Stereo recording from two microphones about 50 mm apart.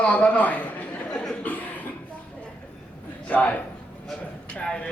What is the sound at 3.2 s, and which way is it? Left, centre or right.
Speech, left.